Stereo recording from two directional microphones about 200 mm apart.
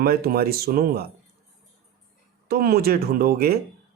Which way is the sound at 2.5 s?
50° right (ahead or behind).